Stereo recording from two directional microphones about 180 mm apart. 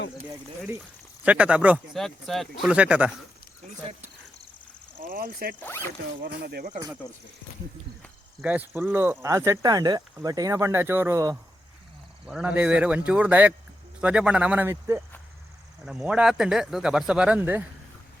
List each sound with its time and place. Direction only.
1.2 s speech: 5° right (ahead or behind)
4.9 s speech: 55° right (ahead or behind)
5.5 s speech: 10° left (ahead or behind)
6.2 s speech: 60° right (ahead or behind)
8.4 s speech: 10° right (ahead or behind)
12.2 s speech: 5° right (ahead or behind)
15.8 s speech: 5° right (ahead or behind)